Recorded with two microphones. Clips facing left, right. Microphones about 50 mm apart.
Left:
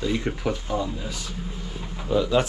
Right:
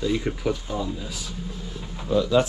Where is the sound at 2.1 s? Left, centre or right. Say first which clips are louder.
Even; centre.